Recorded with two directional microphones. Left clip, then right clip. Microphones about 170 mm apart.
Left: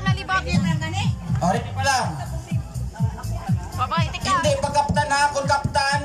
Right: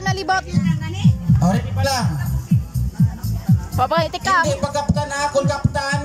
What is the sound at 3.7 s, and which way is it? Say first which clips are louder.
Speech: right 6 dB; 45° right (ahead or behind).